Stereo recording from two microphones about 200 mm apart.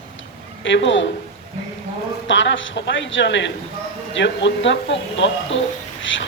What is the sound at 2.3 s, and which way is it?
A man's voice, 65° left (ahead or behind).